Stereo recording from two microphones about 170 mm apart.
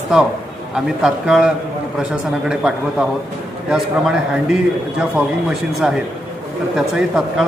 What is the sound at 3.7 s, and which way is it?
Speech, 5° right (ahead or behind).